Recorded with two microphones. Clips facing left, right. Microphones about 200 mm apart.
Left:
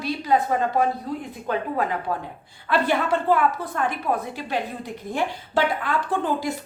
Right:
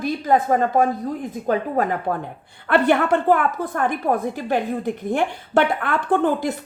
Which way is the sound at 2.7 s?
60° right (ahead or behind).